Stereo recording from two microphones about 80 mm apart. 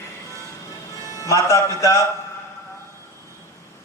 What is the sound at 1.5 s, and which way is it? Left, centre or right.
Speech, left.